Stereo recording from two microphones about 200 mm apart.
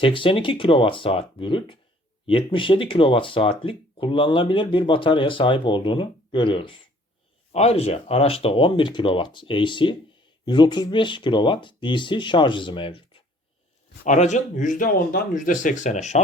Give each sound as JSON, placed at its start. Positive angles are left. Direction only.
{"t": 0.0, "sound": "speech", "side_deg": 25}